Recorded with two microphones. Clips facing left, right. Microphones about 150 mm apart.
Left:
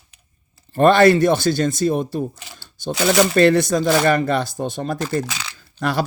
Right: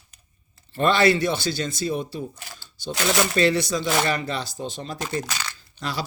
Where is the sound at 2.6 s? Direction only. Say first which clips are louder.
Left 6 dB; 75° left (ahead or behind).